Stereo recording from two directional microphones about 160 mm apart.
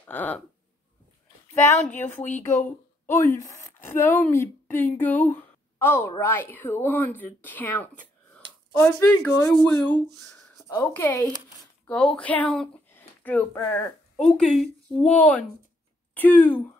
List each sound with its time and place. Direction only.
0.0 s speech: 10° left (ahead or behind)
2.1 s speech: 50° left (ahead or behind)
2.4 s speech: 15° left (ahead or behind)